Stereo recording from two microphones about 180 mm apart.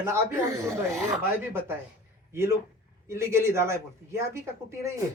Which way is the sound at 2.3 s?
15° right (ahead or behind).